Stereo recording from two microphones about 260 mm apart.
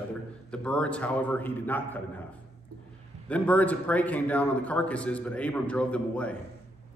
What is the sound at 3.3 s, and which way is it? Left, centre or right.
A man's voice, centre.